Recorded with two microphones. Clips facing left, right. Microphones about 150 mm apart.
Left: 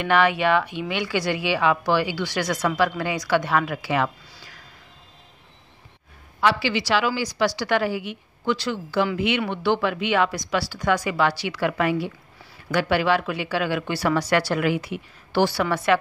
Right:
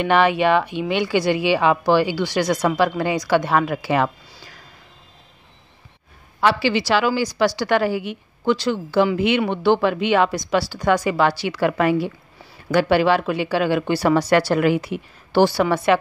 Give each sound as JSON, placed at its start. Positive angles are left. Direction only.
{"t": 0.0, "sound": "speech", "side_deg": -25}
{"t": 6.4, "sound": "speech", "side_deg": -35}
{"t": 15.5, "sound": "speech", "side_deg": -20}